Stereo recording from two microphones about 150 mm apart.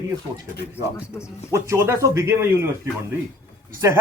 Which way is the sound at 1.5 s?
20° right (ahead or behind).